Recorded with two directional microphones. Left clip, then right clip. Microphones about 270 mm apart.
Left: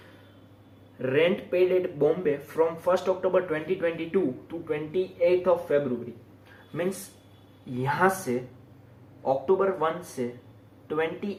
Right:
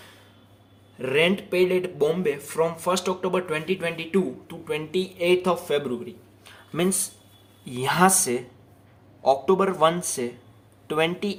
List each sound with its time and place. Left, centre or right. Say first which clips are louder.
1.0 s speech: right 2 dB; right
7.8 s speech: right 4 dB; right